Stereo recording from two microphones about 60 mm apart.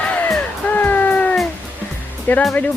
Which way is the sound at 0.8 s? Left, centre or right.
Left.